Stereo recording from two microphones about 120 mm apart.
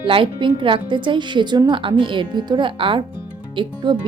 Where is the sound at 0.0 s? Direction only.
45° right (ahead or behind).